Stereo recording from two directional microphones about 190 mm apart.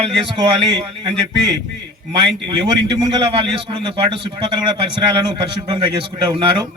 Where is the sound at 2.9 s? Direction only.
25° right (ahead or behind).